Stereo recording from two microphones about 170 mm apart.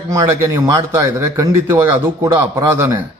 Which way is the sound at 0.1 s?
20° right (ahead or behind).